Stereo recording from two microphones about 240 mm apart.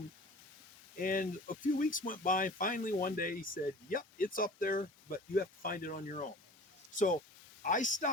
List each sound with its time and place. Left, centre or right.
0.9 s speech: left